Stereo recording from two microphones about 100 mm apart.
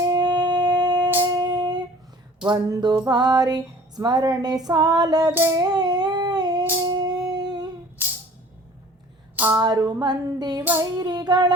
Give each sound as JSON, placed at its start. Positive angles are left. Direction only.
{"t": 0.1, "sound": "a sound", "side_deg": -45}
{"t": 1.0, "sound": "music", "side_deg": -20}
{"t": 1.4, "sound": "child singing", "side_deg": -45}
{"t": 2.6, "sound": "female singing", "side_deg": -35}
{"t": 5.5, "sound": "a sound", "side_deg": -40}
{"t": 9.3, "sound": "a sound", "side_deg": -20}
{"t": 9.6, "sound": "female singing", "side_deg": -40}
{"t": 10.6, "sound": "female singing", "side_deg": -20}
{"t": 11.0, "sound": "female singing", "side_deg": -45}